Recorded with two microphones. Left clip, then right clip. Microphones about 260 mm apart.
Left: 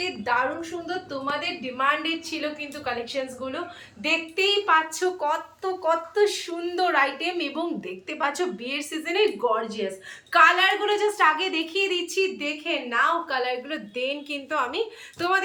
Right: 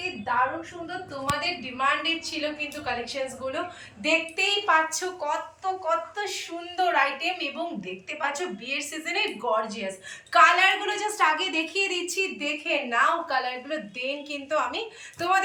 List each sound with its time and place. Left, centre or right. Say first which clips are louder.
0.9 s a woman's voice: even; centre